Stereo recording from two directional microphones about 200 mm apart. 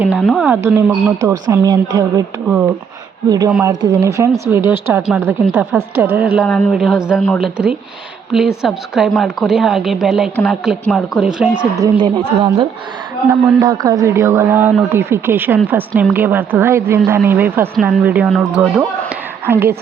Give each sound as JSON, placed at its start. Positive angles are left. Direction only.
{"t": 0.0, "sound": "a woman's voice", "side_deg": 0}
{"t": 3.2, "sound": "a woman's voice", "side_deg": -20}
{"t": 6.3, "sound": "a woman's voice", "side_deg": 0}
{"t": 11.5, "sound": "speech", "side_deg": -25}
{"t": 13.6, "sound": "a woman's voice", "side_deg": -20}